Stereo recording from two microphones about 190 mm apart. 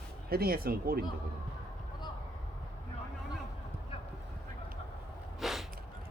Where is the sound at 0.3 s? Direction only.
50° right (ahead or behind).